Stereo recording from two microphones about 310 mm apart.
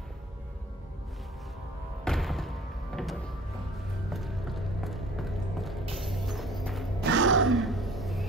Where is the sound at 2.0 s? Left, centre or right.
Centre.